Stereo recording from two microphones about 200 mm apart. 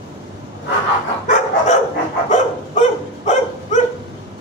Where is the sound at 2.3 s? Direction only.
35° left (ahead or behind).